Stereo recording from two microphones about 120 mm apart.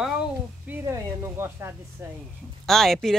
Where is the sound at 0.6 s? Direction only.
20° right (ahead or behind).